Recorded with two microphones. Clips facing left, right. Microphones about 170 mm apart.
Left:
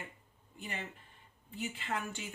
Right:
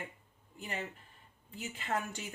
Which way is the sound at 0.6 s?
40° right (ahead or behind).